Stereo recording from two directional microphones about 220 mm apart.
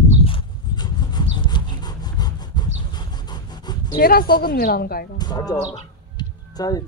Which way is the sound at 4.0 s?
45° left (ahead or behind).